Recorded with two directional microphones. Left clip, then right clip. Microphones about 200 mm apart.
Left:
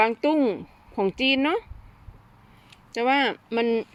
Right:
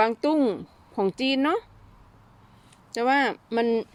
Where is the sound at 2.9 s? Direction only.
Centre (ahead or behind).